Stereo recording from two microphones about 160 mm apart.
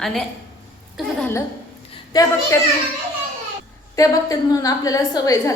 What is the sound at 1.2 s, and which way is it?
Speech, 10° left (ahead or behind).